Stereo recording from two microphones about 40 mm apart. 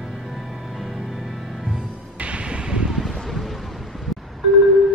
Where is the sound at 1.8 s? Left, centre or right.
Right.